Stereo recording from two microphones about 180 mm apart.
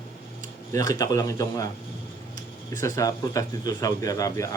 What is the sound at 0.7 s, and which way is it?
Speech, 20° left (ahead or behind).